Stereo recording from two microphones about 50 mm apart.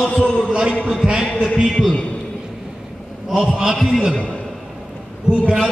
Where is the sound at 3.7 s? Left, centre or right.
Centre.